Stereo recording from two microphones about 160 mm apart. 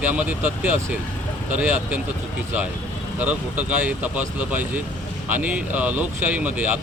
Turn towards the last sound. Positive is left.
turn(degrees=-10)  # may be behind; listen again after turning